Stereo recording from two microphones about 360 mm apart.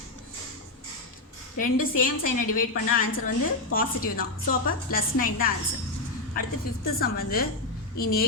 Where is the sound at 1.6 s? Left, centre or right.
Left.